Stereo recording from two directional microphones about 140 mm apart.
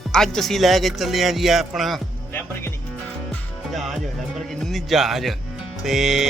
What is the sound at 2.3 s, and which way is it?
Speech, 15° left (ahead or behind).